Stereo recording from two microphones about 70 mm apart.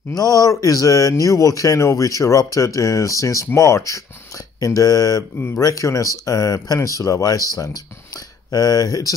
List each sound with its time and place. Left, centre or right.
0.1 s speech: left